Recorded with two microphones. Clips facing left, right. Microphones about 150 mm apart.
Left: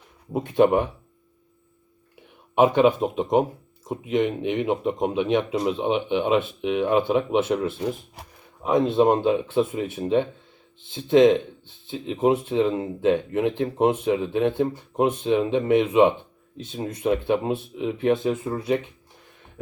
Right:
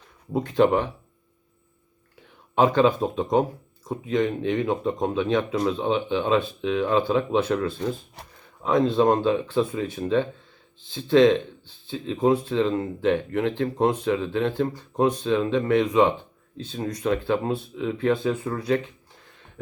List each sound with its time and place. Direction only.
0.3 s speech: 20° left (ahead or behind)
2.6 s speech: 20° left (ahead or behind)